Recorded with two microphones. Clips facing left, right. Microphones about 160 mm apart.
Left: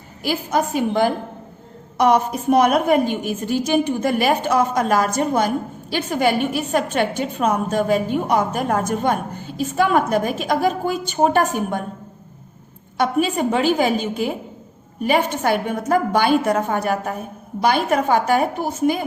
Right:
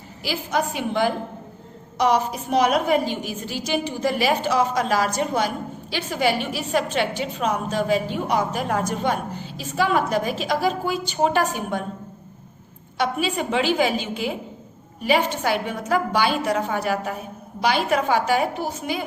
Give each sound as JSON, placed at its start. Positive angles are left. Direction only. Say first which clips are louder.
{"t": 0.2, "sound": "a woman's voice", "louder": "left 4 dB", "side_deg": 50}
{"t": 13.0, "sound": "a woman's voice", "louder": "left 5 dB", "side_deg": 50}